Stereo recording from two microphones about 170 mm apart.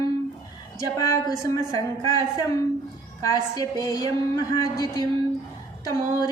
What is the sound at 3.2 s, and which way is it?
A woman's voice, 20° left (ahead or behind).